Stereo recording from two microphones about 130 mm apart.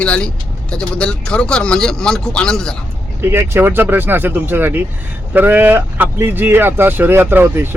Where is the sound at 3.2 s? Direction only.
20° right (ahead or behind).